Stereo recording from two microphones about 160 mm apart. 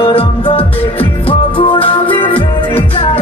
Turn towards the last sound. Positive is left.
turn(degrees=35)  # may be behind; listen again after turning